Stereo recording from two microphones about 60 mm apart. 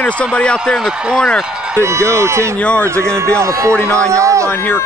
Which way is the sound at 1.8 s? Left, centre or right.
Right.